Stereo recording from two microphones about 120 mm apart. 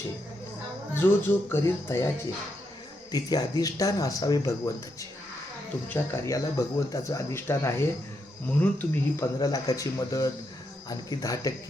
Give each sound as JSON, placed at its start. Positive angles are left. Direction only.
{"t": 0.9, "sound": "speech", "side_deg": 20}
{"t": 3.1, "sound": "speech", "side_deg": 35}
{"t": 9.4, "sound": "speech", "side_deg": 30}